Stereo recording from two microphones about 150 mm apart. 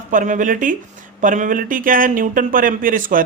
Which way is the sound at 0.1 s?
60° right (ahead or behind).